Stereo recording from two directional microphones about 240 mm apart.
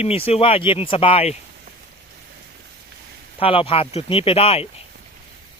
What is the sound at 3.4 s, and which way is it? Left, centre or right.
Speech, left.